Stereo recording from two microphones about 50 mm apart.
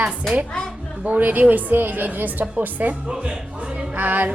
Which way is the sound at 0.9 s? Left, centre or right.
Right.